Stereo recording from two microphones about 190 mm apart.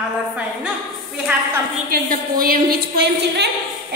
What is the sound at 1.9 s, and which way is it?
A woman's voice, 50° right (ahead or behind).